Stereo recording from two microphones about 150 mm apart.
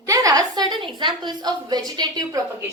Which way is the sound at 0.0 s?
25° right (ahead or behind).